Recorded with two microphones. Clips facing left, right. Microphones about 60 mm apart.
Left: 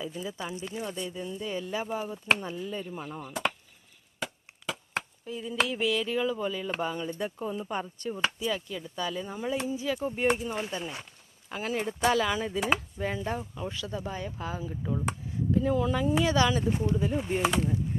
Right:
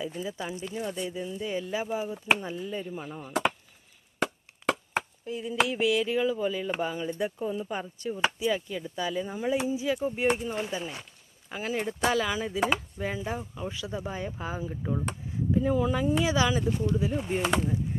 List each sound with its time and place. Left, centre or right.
0.2 s speech: centre
4.2 s a sound: right
4.9 s speech: centre
7.3 s speech: centre
16.6 s speech: left
16.9 s speech: centre